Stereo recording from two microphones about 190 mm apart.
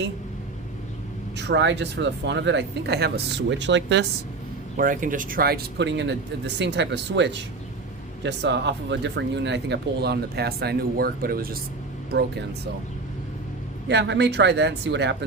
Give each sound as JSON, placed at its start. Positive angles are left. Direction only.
{"t": 1.4, "sound": "speech", "side_deg": -65}
{"t": 4.8, "sound": "speech", "side_deg": -45}
{"t": 13.8, "sound": "speech", "side_deg": -65}